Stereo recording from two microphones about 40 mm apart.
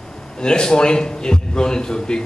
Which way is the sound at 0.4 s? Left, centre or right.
Left.